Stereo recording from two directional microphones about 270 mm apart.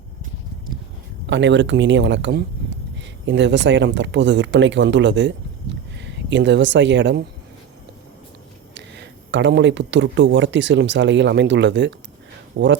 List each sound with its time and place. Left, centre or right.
1.3 s speech: right
8.7 s speech: right